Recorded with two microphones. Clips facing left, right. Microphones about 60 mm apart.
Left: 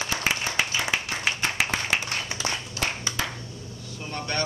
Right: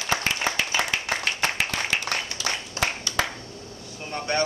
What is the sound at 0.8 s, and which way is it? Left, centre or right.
Clapping, right.